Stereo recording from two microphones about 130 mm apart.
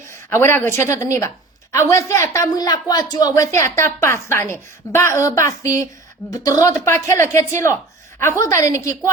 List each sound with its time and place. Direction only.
0.1 s a woman's voice: 20° left (ahead or behind)